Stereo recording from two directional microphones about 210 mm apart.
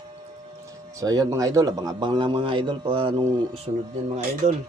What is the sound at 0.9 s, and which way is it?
A man's voice, 15° right (ahead or behind).